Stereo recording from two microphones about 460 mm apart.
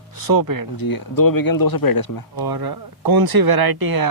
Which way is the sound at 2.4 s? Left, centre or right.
Right.